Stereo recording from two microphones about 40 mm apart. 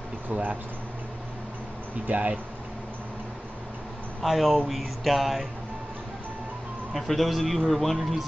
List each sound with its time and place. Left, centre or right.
0.3 s speech: right
2.0 s speech: right
4.2 s a man's voice: centre
6.9 s a man's voice: centre